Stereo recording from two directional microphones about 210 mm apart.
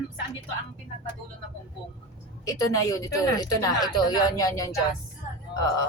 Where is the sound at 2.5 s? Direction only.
15° left (ahead or behind).